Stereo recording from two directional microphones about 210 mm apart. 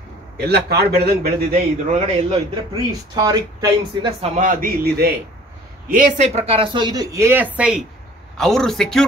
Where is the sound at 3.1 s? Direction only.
20° right (ahead or behind).